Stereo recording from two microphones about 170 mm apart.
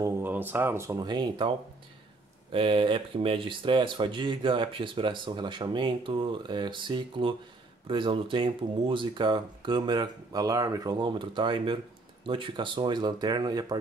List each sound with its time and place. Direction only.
0.0 s speech: 10° right (ahead or behind)
2.5 s speech: 30° right (ahead or behind)